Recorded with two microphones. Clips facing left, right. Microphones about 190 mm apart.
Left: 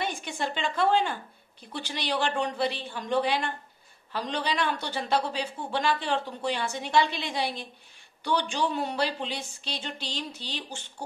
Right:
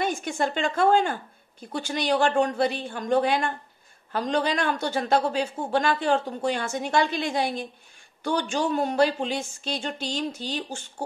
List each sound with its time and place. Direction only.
0.0 s a woman's voice: 45° right (ahead or behind)